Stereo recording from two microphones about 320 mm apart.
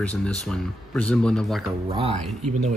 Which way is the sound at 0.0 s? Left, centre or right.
Centre.